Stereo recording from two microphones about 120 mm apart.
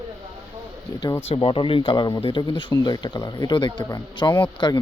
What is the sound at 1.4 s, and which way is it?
Speech, 45° left (ahead or behind).